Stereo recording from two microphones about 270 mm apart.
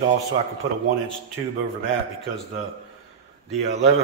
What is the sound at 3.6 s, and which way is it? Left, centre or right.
Speech, right.